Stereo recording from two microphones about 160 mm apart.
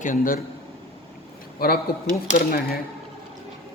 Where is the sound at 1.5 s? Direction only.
70° left (ahead or behind).